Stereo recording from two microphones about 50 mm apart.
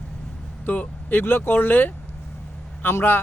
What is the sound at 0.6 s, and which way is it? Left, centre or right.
Speech, left.